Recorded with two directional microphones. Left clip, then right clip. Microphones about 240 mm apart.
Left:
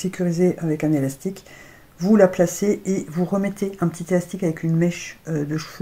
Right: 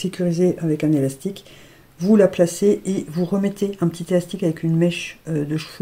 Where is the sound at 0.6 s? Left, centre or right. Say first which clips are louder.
Right 2 dB; right.